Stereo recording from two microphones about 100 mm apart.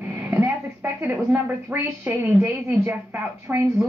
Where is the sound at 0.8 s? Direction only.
20° right (ahead or behind).